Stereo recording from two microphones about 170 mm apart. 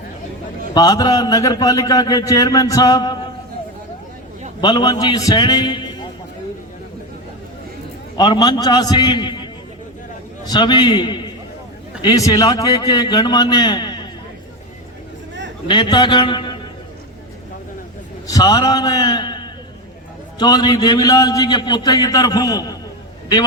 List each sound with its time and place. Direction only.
0.7 s a man's voice: 25° left (ahead or behind)
4.6 s a man's voice: 25° left (ahead or behind)
8.1 s a man's voice: 25° left (ahead or behind)
10.5 s a man's voice: 25° left (ahead or behind)
15.6 s a man's voice: 30° left (ahead or behind)
18.3 s a man's voice: 20° left (ahead or behind)